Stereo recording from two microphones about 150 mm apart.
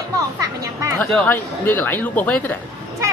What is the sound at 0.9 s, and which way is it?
Speech, 10° left (ahead or behind).